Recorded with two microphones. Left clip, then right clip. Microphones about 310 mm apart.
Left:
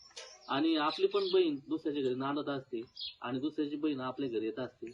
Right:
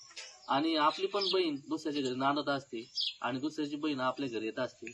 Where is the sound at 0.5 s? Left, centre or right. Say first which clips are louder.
Right 2 dB; centre.